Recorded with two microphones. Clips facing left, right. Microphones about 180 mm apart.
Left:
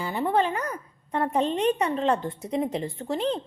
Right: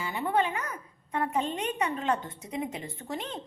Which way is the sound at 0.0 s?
35° left (ahead or behind).